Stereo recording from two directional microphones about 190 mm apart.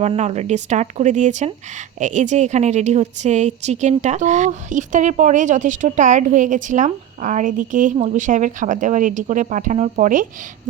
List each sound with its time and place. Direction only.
0.0 s a woman's voice: 35° right (ahead or behind)